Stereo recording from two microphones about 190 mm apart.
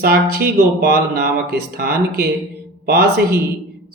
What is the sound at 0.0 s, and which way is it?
Speech, 55° right (ahead or behind).